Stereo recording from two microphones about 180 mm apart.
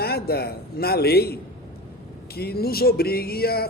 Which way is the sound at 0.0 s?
60° left (ahead or behind).